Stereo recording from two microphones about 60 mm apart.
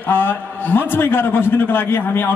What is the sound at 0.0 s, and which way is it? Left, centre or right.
A man's voice, left.